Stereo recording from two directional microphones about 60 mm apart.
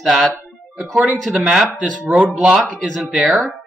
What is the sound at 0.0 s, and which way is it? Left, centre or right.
Speech, centre.